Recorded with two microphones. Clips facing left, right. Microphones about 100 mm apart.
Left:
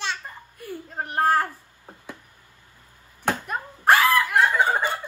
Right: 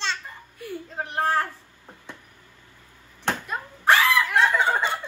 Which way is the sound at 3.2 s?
10° left (ahead or behind).